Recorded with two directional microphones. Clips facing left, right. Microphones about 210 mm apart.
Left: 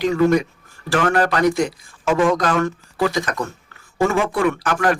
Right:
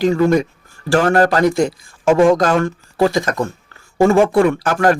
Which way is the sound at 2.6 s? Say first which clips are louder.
Right 4 dB; 30° right (ahead or behind).